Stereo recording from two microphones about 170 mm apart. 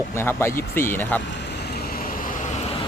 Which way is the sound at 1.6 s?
65° left (ahead or behind).